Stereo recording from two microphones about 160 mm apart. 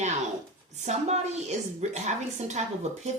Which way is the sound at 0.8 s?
45° right (ahead or behind).